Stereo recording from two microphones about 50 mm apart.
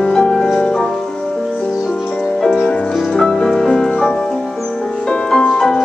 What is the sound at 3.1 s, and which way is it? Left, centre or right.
Music, centre.